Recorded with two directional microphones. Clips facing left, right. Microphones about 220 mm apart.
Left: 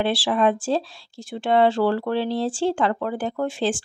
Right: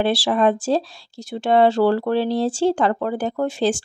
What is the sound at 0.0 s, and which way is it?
Speech, 40° right (ahead or behind).